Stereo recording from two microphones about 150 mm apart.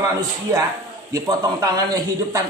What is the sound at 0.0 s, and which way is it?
Speech, 25° right (ahead or behind).